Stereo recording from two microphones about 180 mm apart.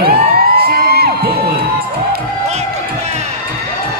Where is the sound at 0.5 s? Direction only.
60° right (ahead or behind).